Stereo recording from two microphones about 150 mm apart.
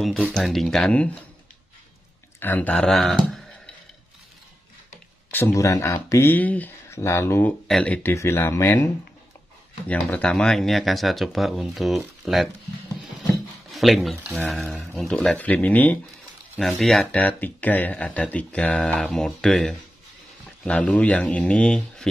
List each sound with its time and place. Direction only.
0.0 s speech: 5° left (ahead or behind)
2.4 s speech: 10° left (ahead or behind)
5.3 s speech: 15° left (ahead or behind)
7.6 s speech: 5° left (ahead or behind)
13.7 s speech: centre (ahead or behind)